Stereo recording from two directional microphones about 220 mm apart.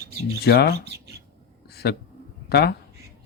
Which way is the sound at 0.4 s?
50° left (ahead or behind).